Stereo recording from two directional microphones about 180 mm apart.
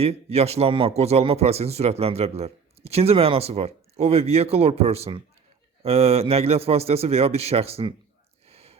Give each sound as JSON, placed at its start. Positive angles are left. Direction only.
{"t": 0.0, "sound": "speech", "side_deg": -35}
{"t": 8.4, "sound": "whispering", "side_deg": -35}